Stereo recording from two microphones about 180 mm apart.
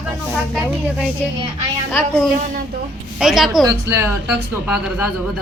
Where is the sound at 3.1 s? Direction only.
Centre (ahead or behind).